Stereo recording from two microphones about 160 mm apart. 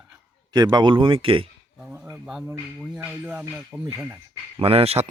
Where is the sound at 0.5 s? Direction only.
25° right (ahead or behind).